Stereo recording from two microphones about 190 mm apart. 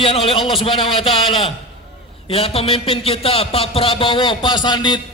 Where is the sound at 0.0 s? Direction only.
30° left (ahead or behind).